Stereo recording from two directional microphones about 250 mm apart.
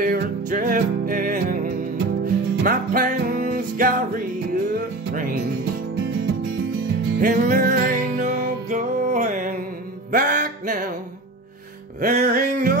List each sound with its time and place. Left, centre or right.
0.0 s music: right
7.2 s music: right
12.0 s music: right